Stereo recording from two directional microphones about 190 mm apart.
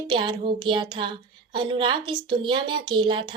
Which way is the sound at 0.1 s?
25° right (ahead or behind).